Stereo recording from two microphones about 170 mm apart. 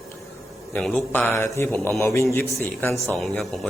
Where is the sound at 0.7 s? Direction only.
5° left (ahead or behind).